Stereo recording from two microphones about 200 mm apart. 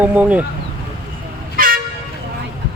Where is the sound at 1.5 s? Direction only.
45° right (ahead or behind).